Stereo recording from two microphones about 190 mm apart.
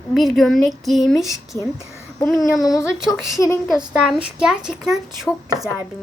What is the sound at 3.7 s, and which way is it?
Speech, 5° right (ahead or behind).